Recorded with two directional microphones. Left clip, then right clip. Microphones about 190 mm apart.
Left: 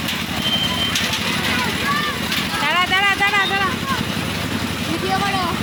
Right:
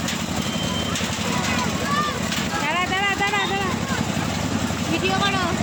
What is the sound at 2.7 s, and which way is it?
Vehicle, 5° right (ahead or behind).